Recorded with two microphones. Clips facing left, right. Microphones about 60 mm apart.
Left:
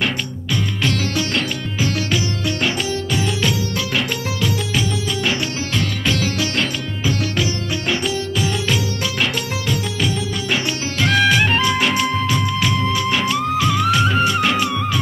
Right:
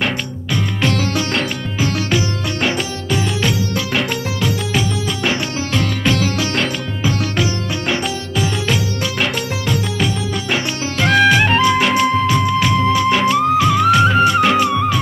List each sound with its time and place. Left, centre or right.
0.8 s music: right
7.9 s music: right